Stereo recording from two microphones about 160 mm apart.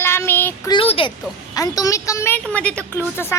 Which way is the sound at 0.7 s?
35° left (ahead or behind).